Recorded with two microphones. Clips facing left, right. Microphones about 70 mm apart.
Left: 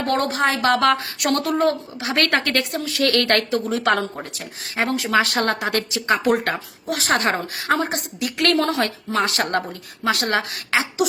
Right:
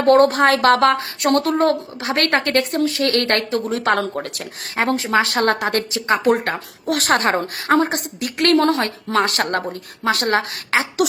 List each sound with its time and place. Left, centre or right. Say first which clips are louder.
0.0 s a woman's voice: right 9 dB; right
0.3 s a woman's voice: right 5 dB; right
0.8 s a woman's voice: right 2 dB; right
3.9 s speech: right 3 dB; right
4.8 s a woman's voice: right 2 dB; right
6.8 s a woman's voice: right 3 dB; right